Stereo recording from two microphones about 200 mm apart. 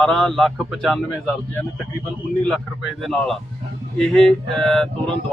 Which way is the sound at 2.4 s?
Centre (ahead or behind).